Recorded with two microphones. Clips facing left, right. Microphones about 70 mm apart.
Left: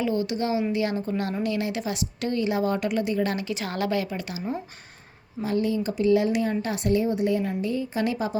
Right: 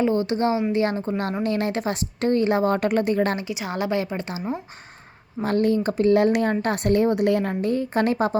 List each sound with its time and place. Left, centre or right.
0.0 s a woman's voice: right
3.4 s a woman's voice: centre; by 4.4 s right
5.4 s a woman's voice: right
7.6 s a woman's voice: right